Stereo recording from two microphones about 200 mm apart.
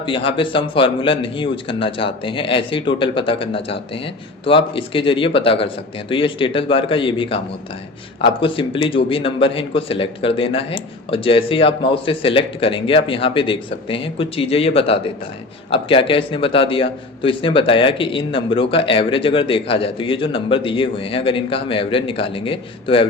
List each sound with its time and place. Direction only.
0.0 s a man's voice: 25° left (ahead or behind)